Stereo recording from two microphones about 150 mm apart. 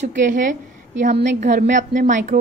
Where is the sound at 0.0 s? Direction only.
60° right (ahead or behind).